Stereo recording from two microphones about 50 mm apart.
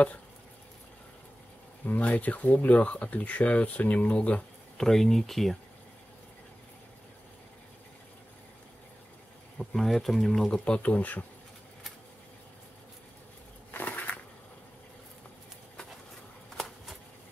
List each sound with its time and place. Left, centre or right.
1.9 s speech: left
4.7 s speech: centre
9.6 s speech: centre
10.6 s speech: left
13.7 s a sound: left
16.5 s a sound: centre